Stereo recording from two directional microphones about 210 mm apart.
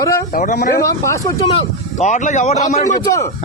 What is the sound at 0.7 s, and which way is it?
Speech, 15° left (ahead or behind).